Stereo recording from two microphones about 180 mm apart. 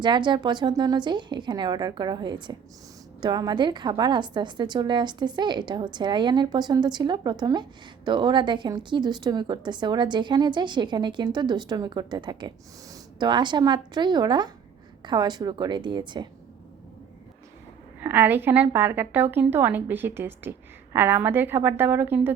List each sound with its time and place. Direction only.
0.0 s a woman's voice: 25° right (ahead or behind)
18.0 s a woman's voice: 10° right (ahead or behind)